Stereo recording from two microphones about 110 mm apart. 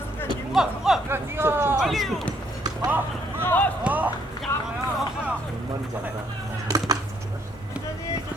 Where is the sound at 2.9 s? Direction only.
15° right (ahead or behind).